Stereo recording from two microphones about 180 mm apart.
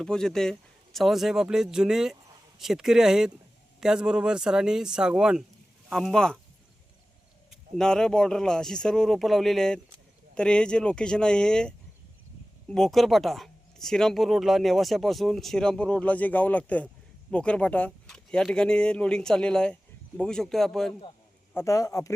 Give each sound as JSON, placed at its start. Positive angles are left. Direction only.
{"t": 0.0, "sound": "speech", "side_deg": 5}
{"t": 7.5, "sound": "speech", "side_deg": 5}
{"t": 21.5, "sound": "a man's voice", "side_deg": 15}